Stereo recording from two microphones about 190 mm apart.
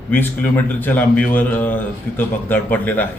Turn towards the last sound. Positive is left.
turn(degrees=10)  # may be behind; listen again after turning